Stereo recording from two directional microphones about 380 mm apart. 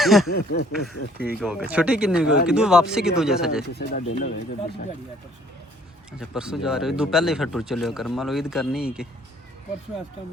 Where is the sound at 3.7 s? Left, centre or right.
Left.